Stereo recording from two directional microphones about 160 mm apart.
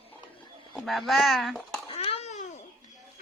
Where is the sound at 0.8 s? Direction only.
Centre (ahead or behind).